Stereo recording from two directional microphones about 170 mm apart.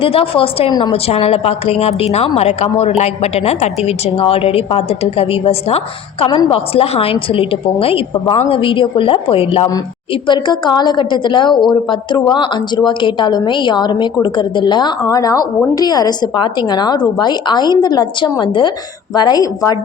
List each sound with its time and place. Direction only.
0.0 s a woman's voice: 35° left (ahead or behind)